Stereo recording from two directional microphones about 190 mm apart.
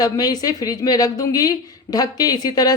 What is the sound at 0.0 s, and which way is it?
Speech, 20° left (ahead or behind).